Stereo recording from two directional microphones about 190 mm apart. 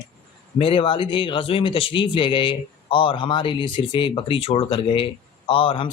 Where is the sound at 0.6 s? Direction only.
30° left (ahead or behind).